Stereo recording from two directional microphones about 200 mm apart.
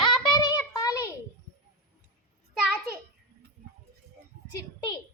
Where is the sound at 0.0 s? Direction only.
25° left (ahead or behind).